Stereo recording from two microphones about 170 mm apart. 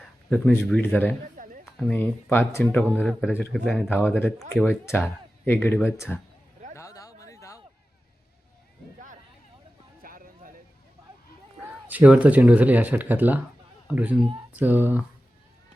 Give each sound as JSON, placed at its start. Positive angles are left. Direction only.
{"t": 0.3, "sound": "speech", "side_deg": 5}
{"t": 1.4, "sound": "a sound", "side_deg": -50}
{"t": 1.8, "sound": "speech", "side_deg": 10}
{"t": 3.0, "sound": "speech", "side_deg": 0}
{"t": 6.7, "sound": "a sound", "side_deg": 20}
{"t": 10.0, "sound": "music", "side_deg": -55}
{"t": 11.9, "sound": "speech", "side_deg": -10}